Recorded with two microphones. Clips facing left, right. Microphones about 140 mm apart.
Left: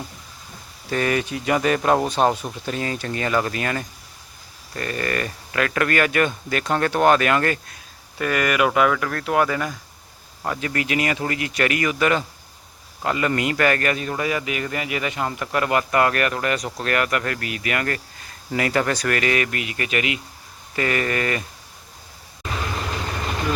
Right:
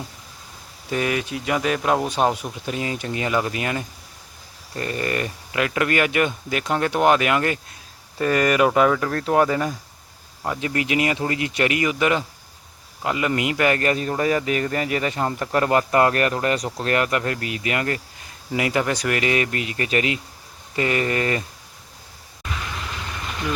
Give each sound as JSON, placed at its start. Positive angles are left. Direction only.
{"t": 0.9, "sound": "speech", "side_deg": -10}
{"t": 8.2, "sound": "speech", "side_deg": -30}
{"t": 10.4, "sound": "speech", "side_deg": -20}
{"t": 13.9, "sound": "speech", "side_deg": -35}
{"t": 20.7, "sound": "speech", "side_deg": -20}